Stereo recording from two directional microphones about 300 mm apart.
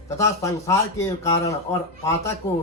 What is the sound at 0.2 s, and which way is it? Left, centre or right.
A man's voice, centre.